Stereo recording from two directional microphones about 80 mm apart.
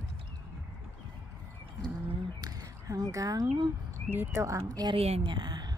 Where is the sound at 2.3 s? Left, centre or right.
Right.